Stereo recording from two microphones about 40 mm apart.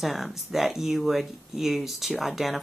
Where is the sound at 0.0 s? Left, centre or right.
Centre.